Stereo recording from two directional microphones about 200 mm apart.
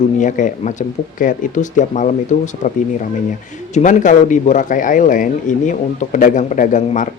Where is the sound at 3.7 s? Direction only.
40° left (ahead or behind).